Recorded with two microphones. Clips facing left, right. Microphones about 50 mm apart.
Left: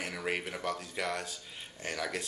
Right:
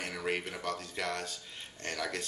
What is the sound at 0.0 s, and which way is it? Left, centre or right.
Speech, centre.